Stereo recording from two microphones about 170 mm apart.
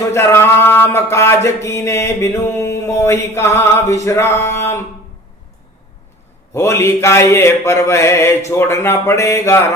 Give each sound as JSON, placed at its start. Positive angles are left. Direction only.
{"t": 0.1, "sound": "mantra", "side_deg": 15}
{"t": 6.5, "sound": "mantra", "side_deg": 15}